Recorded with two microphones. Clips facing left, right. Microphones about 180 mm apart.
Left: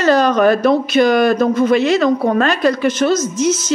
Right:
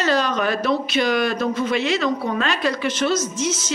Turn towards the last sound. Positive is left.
turn(degrees=40)  # may be behind; listen again after turning